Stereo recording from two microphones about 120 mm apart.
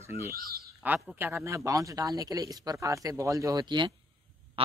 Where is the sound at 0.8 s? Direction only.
15° right (ahead or behind); by 3.9 s 40° right (ahead or behind).